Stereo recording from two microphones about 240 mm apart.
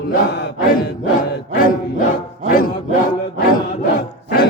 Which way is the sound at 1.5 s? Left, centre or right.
Left.